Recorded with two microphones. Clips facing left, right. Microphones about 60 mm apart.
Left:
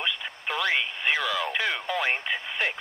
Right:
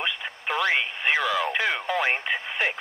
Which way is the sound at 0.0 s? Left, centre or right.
Centre.